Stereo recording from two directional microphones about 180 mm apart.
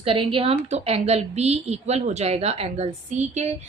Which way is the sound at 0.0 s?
30° right (ahead or behind).